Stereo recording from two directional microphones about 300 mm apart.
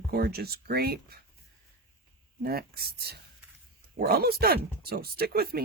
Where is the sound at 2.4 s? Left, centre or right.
Right.